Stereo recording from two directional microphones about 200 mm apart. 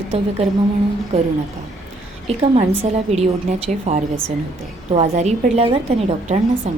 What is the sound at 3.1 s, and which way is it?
A woman's voice, 30° right (ahead or behind).